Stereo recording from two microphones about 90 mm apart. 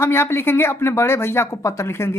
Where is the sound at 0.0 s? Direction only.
25° left (ahead or behind).